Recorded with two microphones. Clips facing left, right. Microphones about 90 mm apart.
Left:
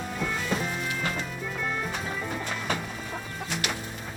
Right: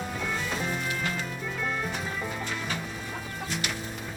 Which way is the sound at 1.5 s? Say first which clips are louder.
Even; centre (ahead or behind).